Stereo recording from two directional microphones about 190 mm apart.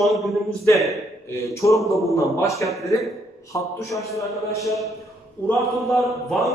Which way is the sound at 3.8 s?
15° left (ahead or behind).